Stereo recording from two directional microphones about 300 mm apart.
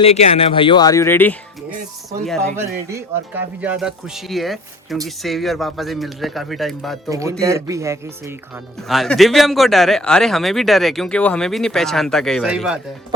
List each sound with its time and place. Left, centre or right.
0.0 s speech: left; by 7.0 s centre
7.1 s speech: centre